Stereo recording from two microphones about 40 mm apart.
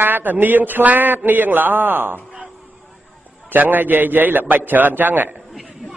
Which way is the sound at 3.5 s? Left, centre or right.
Right.